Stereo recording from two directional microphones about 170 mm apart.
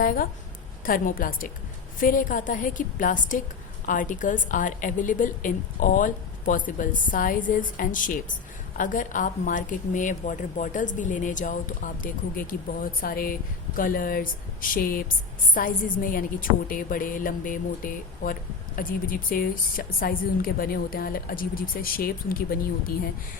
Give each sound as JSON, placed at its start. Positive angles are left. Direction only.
{"t": 0.0, "sound": "a woman's voice", "side_deg": 55}